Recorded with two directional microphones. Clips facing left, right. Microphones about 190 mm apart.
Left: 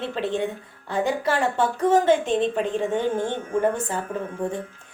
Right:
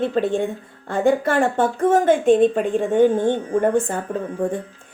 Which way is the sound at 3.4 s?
35° right (ahead or behind).